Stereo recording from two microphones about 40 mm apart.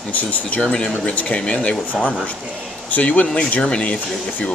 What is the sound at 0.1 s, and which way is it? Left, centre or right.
Speech, left.